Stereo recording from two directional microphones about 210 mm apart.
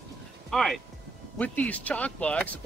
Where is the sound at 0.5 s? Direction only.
Centre (ahead or behind).